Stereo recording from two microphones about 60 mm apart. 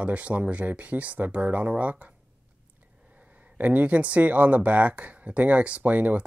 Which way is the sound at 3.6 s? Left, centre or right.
Right.